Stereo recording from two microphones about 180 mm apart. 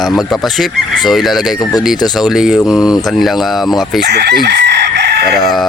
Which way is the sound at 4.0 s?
70° right (ahead or behind).